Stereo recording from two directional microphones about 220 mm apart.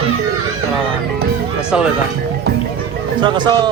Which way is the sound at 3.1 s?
20° right (ahead or behind).